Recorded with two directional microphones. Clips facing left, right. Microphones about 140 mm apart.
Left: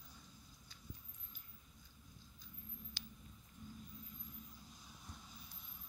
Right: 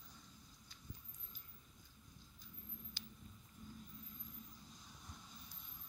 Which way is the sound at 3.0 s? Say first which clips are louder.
Left 1 dB; 80° left.